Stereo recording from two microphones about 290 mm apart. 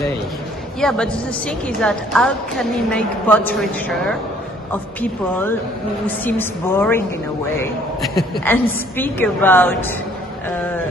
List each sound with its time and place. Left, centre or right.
0.7 s a woman's voice: centre